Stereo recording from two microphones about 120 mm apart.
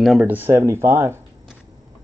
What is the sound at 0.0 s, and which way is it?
Speech, centre (ahead or behind).